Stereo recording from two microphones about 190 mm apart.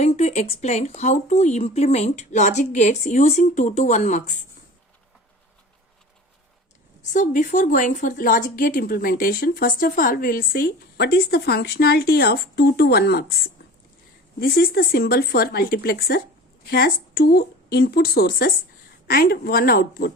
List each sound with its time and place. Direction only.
0.0 s speech: 35° left (ahead or behind)
7.1 s speech: 40° left (ahead or behind)
14.3 s speech: 50° left (ahead or behind)